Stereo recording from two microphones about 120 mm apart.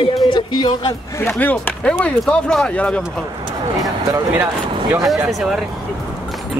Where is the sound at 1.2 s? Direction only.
15° left (ahead or behind).